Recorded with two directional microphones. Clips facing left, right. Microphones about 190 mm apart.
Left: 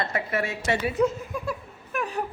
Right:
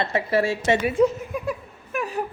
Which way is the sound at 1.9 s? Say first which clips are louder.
Right 2 dB; centre (ahead or behind).